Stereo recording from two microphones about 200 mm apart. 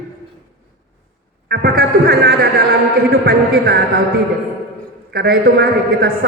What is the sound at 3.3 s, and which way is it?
Speech, 50° right (ahead or behind).